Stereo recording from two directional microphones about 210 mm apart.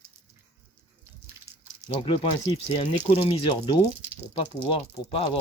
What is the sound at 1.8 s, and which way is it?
Speech, 25° left (ahead or behind).